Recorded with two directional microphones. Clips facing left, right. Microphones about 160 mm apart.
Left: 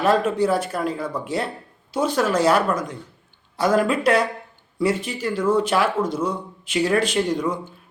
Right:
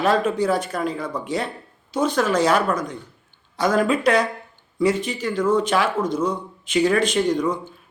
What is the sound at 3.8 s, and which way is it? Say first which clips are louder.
Speech: even; 5° left (ahead or behind).